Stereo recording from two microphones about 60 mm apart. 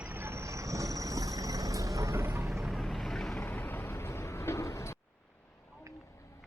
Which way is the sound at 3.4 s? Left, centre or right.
Left.